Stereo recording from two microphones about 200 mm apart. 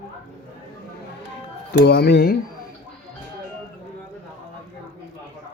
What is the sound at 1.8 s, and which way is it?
Speech, 50° left (ahead or behind).